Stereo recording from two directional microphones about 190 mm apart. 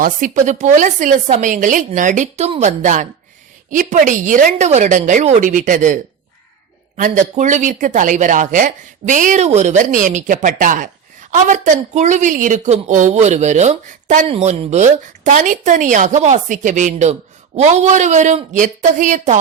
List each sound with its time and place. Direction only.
0.0 s a woman's voice: 40° right (ahead or behind)